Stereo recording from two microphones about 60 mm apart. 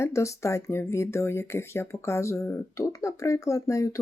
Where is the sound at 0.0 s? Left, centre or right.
Left.